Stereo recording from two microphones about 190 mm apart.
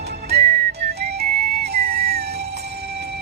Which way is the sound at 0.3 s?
35° right (ahead or behind).